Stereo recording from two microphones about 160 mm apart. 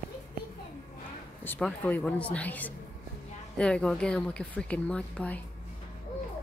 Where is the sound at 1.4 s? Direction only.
10° left (ahead or behind).